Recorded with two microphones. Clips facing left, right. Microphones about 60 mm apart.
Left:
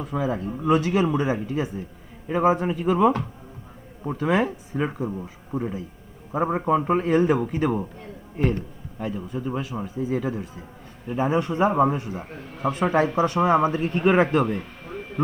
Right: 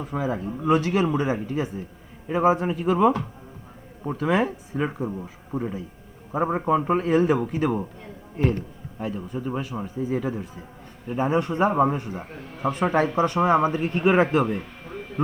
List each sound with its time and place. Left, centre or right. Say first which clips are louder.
0.2 s speech: left 1 dB; right
0.5 s a man's voice: even; centre
9.0 s a man's voice: even; centre